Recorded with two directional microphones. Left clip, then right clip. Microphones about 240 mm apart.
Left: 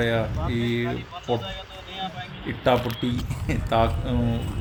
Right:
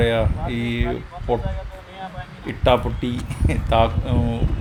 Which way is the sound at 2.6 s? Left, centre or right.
Centre.